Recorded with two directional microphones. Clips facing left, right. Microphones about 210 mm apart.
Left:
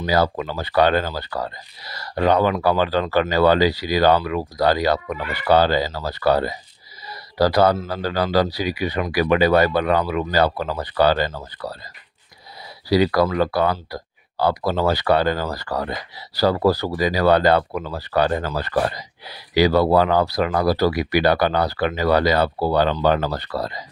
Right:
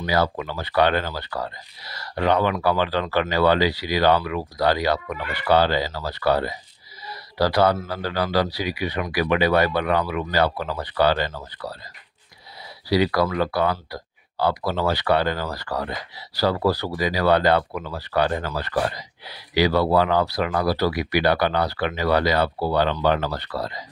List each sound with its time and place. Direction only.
0.0 s speech: 40° left (ahead or behind)
12.9 s speech: 40° left (ahead or behind)